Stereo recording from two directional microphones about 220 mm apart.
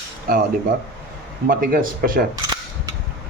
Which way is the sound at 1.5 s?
40° right (ahead or behind).